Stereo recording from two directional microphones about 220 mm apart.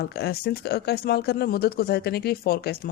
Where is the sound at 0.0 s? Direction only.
45° left (ahead or behind).